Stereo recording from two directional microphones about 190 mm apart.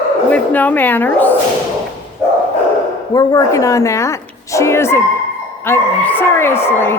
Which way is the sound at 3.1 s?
20° left (ahead or behind).